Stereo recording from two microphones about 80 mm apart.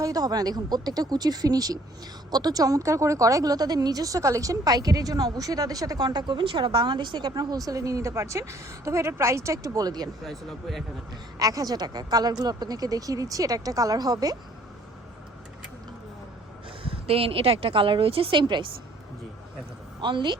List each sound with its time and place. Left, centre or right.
0.0 s speech: right
10.2 s speech: centre
11.3 s speech: right
17.7 s a woman's voice: right
20.0 s a woman's voice: right